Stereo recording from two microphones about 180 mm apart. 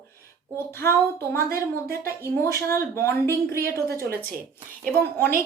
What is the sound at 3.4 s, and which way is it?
Speech, 60° right (ahead or behind).